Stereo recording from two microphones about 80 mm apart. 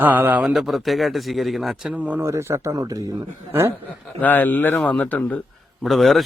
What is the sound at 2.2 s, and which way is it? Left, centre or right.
Speech, right.